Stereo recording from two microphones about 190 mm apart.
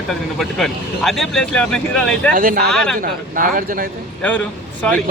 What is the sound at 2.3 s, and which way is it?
Speech, 50° right (ahead or behind).